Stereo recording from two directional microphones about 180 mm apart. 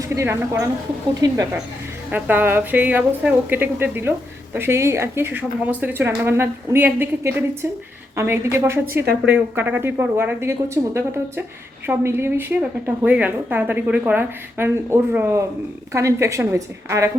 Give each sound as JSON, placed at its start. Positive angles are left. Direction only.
{"t": 0.2, "sound": "a woman's voice", "side_deg": -15}
{"t": 2.0, "sound": "a woman's voice", "side_deg": -10}